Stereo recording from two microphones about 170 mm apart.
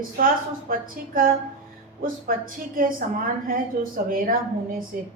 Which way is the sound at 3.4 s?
55° right (ahead or behind).